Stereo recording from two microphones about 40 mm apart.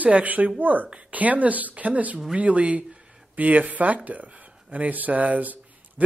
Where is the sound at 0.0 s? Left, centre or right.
Right.